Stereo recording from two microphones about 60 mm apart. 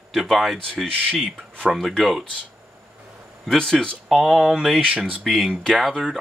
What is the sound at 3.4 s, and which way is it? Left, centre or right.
Speech, centre.